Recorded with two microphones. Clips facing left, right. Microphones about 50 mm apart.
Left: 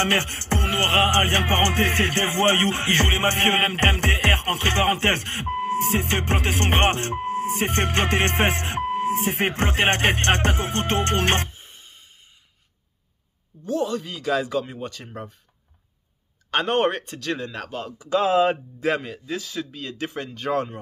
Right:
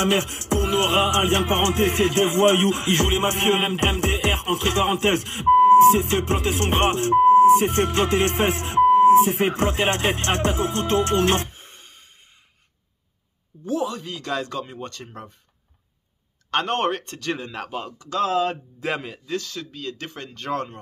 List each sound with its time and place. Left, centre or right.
0.0 s music: left
8.9 s beep: left
9.6 s music: left
13.7 s speech: centre
16.4 s speech: centre
17.9 s speech: left
18.8 s speech: centre